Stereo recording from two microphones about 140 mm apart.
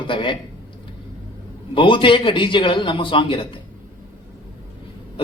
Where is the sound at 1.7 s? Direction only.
40° left (ahead or behind).